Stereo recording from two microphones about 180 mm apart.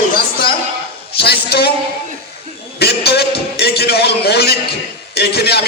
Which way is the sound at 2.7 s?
65° left (ahead or behind).